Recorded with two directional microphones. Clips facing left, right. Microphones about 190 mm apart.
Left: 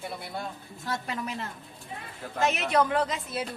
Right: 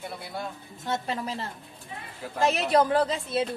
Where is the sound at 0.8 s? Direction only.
25° right (ahead or behind).